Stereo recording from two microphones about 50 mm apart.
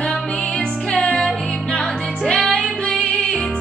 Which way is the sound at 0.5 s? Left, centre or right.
Centre.